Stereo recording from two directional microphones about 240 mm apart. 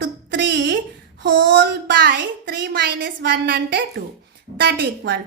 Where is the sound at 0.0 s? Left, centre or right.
Right.